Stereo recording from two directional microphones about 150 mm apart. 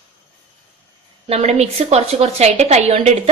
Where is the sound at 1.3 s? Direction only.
45° right (ahead or behind).